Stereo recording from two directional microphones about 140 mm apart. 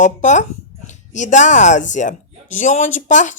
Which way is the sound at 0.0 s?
60° left (ahead or behind).